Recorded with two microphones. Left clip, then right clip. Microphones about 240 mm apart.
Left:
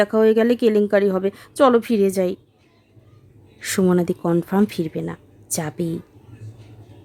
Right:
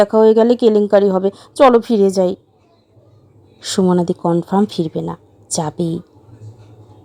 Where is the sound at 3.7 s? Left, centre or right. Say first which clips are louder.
Right 4 dB; centre.